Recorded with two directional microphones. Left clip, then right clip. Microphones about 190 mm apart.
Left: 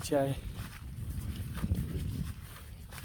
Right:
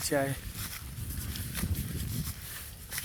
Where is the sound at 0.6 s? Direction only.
60° right (ahead or behind).